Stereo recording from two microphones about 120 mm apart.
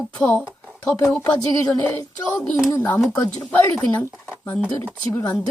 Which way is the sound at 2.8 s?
15° left (ahead or behind).